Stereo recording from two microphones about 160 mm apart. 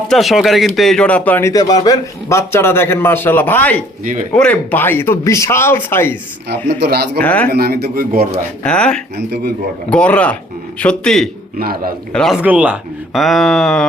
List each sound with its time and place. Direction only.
0.1 s speech: centre (ahead or behind)
4.0 s speech: 55° right (ahead or behind)
4.4 s speech: 10° left (ahead or behind)
6.7 s a man's voice: 90° right; by 8.3 s 70° right (ahead or behind)
8.6 s speech: 5° left (ahead or behind)
9.1 s speech: 90° right
9.9 s speech: 10° left (ahead or behind)
10.8 s a sound: 5° left (ahead or behind)
11.6 s a man's voice: 70° right (ahead or behind)
12.1 s a sound: 5° left (ahead or behind)
12.4 s speech: 10° right (ahead or behind)
13.2 s a sound: centre (ahead or behind)